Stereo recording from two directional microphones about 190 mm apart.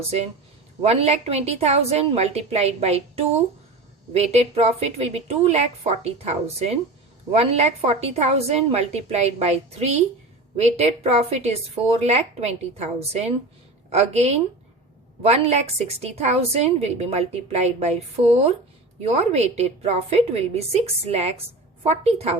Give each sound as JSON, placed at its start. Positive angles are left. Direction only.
{"t": 0.0, "sound": "a woman's voice", "side_deg": -35}